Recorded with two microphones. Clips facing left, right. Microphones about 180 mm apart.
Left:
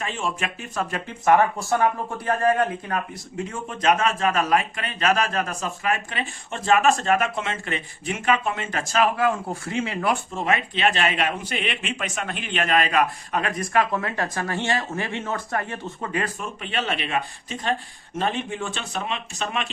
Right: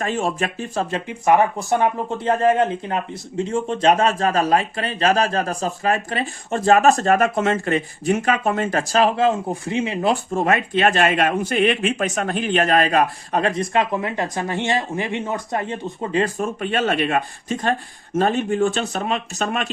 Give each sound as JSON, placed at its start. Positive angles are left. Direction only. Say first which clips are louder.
{"t": 0.0, "sound": "speech", "louder": "right 6 dB", "side_deg": -40}
{"t": 10.3, "sound": "speech", "louder": "right 6 dB", "side_deg": -45}
{"t": 16.4, "sound": "speech", "louder": "right 8 dB", "side_deg": -45}